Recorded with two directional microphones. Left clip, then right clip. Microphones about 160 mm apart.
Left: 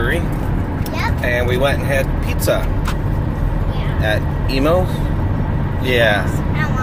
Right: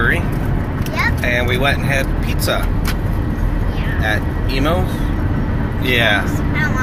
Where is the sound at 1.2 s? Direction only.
30° left (ahead or behind).